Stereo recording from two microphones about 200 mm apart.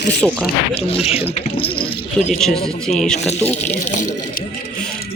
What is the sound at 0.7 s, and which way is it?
Speech, 30° left (ahead or behind).